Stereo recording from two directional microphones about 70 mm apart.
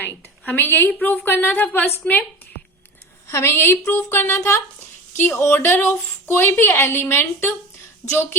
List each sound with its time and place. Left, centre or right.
0.4 s speech: left
3.2 s speech: left
4.4 s speech: left